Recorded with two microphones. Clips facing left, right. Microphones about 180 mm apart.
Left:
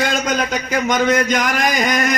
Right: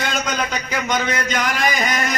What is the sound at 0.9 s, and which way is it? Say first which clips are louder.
Speech: left 6 dB; 45° left (ahead or behind).